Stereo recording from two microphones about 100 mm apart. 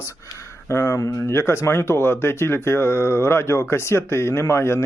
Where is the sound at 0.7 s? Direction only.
30° left (ahead or behind).